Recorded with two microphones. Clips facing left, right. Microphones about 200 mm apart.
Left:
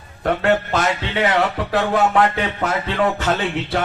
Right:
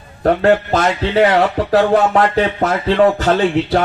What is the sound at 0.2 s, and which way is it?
Speech, 40° right (ahead or behind).